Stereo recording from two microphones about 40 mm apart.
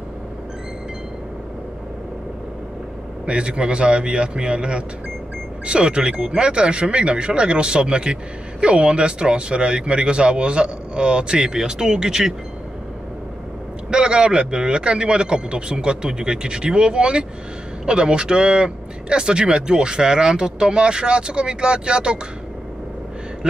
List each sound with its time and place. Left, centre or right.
3.3 s speech: right
13.8 s speech: right